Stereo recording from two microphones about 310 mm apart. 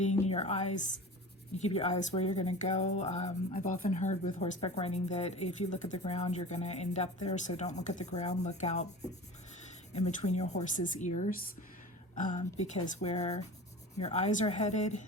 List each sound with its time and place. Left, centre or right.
0.0 s a woman's voice: left